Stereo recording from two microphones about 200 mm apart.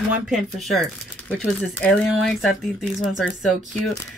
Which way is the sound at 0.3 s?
Centre (ahead or behind).